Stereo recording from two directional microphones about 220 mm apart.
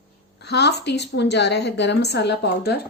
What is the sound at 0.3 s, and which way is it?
A woman's voice, 50° left (ahead or behind).